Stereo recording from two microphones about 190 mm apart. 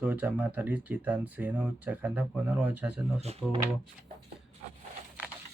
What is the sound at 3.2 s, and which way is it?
Speech, 30° right (ahead or behind).